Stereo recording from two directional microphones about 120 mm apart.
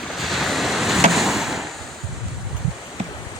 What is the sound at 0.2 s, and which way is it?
Waves, centre (ahead or behind).